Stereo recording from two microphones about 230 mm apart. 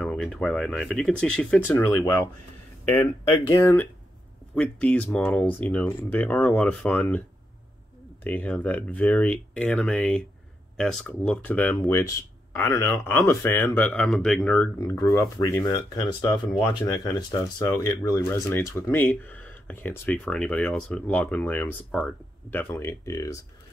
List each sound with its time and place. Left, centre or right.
0.0 s speech: centre
3.3 s speech: left
3.5 s speech: centre